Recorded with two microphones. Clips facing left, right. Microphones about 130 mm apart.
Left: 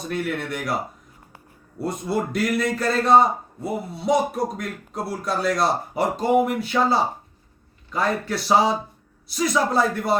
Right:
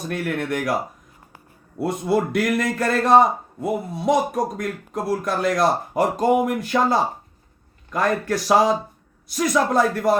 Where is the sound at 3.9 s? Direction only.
50° right (ahead or behind).